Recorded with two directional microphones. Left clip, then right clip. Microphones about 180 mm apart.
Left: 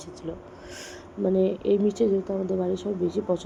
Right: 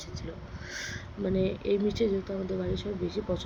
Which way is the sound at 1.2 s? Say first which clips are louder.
Left 7 dB; 20° left (ahead or behind).